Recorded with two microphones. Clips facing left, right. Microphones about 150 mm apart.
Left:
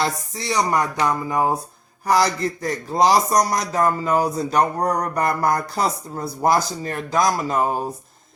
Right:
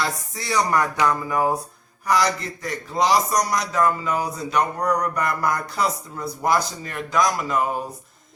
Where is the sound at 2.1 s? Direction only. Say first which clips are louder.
Left 3 dB; 35° left (ahead or behind).